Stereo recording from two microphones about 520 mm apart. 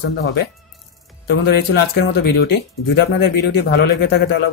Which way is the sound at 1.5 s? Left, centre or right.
Centre.